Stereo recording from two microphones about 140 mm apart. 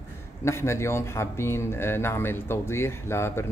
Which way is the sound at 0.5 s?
20° left (ahead or behind).